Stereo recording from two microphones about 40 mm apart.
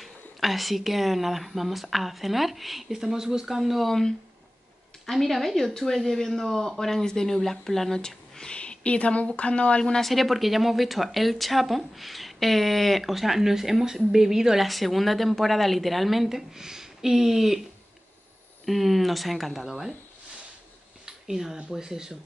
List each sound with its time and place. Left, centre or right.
0.0 s speech: centre
5.0 s speech: centre
8.0 s a sound: centre
8.5 s a sound: left
9.4 s speech: left
10.0 s speech: centre
14.7 s speech: centre
18.7 s speech: centre
21.0 s a sound: centre
21.6 s speech: centre